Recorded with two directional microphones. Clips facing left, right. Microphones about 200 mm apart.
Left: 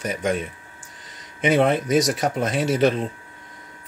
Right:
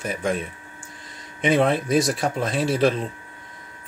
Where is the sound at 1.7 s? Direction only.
Centre (ahead or behind).